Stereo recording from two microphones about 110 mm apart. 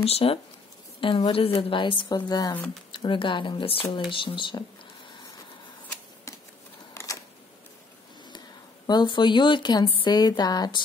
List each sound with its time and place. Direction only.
0.0 s speech: 60° left (ahead or behind)
1.0 s speech: 50° left (ahead or behind)
2.9 s speech: 50° left (ahead or behind)
8.8 s speech: 45° left (ahead or behind)